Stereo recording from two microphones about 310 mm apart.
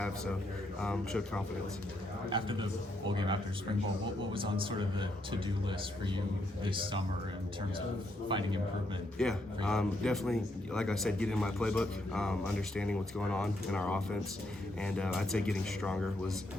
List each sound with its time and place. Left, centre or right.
0.8 s speech: centre
2.3 s speech: centre
8.3 s speech: centre
9.2 s speech: centre